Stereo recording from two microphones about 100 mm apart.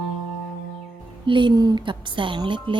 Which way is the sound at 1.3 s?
55° right (ahead or behind).